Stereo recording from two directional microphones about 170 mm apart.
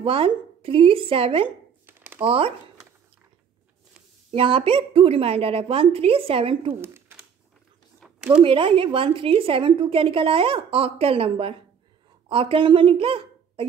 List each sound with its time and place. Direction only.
0.0 s a woman's voice: 35° right (ahead or behind)
1.9 s a sound: 10° right (ahead or behind)
2.2 s a woman's voice: 35° right (ahead or behind)
4.3 s a woman's voice: 30° right (ahead or behind)
6.7 s speech: 15° right (ahead or behind)
8.0 s a sound: 5° right (ahead or behind)
8.4 s a woman's voice: 30° right (ahead or behind)